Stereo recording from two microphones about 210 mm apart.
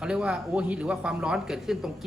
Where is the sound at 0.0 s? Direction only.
5° right (ahead or behind).